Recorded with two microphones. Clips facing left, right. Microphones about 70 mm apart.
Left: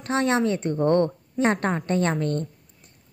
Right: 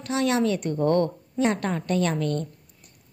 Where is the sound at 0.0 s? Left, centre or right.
Left.